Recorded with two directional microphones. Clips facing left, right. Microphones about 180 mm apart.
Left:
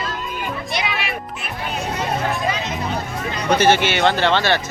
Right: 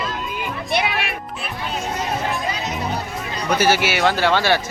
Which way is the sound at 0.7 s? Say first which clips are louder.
Right 5 dB; 60° right (ahead or behind).